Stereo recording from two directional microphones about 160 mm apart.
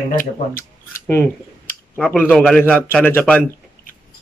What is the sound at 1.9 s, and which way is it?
Speech, 10° left (ahead or behind).